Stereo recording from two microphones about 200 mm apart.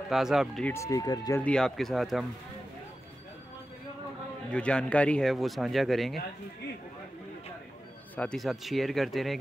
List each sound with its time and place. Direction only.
0.1 s speech: centre (ahead or behind)
0.7 s speech: 15° left (ahead or behind)
1.4 s speech: 5° left (ahead or behind)
4.5 s speech: 5° left (ahead or behind)
8.2 s speech: 5° left (ahead or behind)